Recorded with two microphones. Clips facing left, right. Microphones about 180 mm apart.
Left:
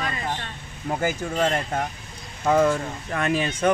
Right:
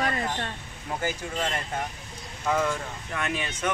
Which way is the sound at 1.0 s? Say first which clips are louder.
Left 6 dB; 50° left (ahead or behind).